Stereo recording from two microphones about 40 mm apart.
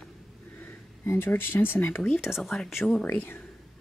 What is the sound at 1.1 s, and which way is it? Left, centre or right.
Speech, left.